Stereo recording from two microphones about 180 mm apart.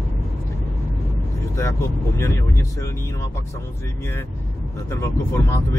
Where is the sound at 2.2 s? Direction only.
15° left (ahead or behind).